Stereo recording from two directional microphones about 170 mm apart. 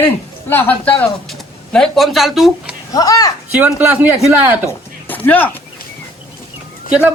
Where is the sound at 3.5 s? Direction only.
10° right (ahead or behind).